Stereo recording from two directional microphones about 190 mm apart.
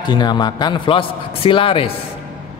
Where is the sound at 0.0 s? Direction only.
25° left (ahead or behind).